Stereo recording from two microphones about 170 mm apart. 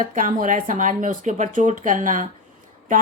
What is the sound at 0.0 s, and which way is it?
A woman's voice, 50° right (ahead or behind).